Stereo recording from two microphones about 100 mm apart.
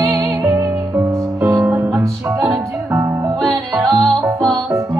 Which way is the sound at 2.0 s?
35° right (ahead or behind).